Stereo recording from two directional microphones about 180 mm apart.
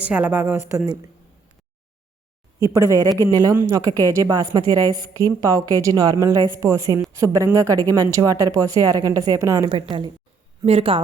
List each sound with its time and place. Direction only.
0.0 s a woman's voice: 10° right (ahead or behind)
2.6 s a woman's voice: 20° right (ahead or behind)
10.7 s speech: 30° right (ahead or behind)